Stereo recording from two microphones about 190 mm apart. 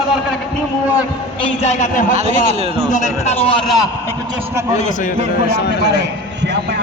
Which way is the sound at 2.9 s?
40° left (ahead or behind).